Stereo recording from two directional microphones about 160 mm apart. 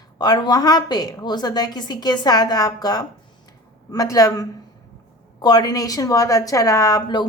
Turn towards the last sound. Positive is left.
turn(degrees=25)  # may be behind; listen again after turning